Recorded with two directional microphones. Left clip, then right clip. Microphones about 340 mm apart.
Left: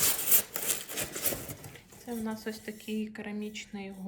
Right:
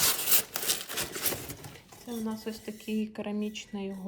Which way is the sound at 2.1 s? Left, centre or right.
Centre.